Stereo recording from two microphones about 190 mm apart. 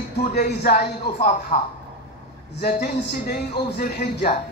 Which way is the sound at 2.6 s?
60° left (ahead or behind).